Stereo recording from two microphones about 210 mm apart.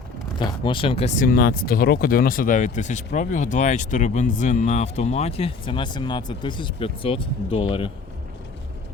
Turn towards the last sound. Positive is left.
turn(degrees=25)  # may be behind; listen again after turning